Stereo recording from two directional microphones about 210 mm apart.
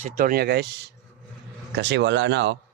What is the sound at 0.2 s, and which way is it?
Speech, 45° right (ahead or behind).